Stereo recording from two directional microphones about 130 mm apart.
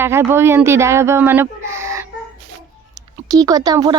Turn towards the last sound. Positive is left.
turn(degrees=-30)  # may be behind; listen again after turning